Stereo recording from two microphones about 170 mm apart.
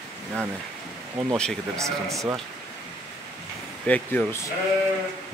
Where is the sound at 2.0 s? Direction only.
20° right (ahead or behind).